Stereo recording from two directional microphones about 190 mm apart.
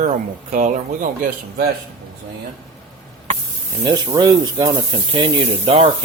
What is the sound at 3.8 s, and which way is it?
Speech, 20° right (ahead or behind).